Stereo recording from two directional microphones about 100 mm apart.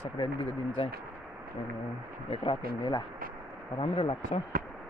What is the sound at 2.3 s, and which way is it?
Speech, 60° left (ahead or behind).